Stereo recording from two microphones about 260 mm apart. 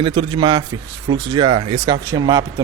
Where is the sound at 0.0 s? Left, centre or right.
Centre.